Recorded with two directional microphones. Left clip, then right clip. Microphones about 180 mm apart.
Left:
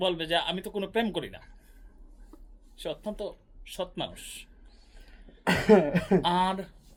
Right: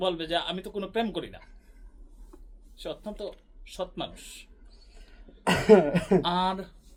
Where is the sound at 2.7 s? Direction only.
45° left (ahead or behind).